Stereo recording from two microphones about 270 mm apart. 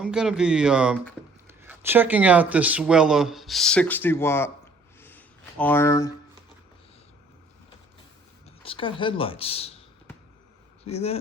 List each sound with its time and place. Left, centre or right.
0.0 s speech: centre
8.6 s speech: centre
10.8 s speech: left